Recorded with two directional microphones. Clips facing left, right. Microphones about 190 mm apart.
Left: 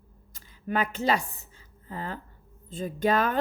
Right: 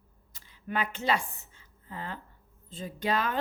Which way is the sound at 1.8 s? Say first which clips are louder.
Left 4 dB; 40° left (ahead or behind).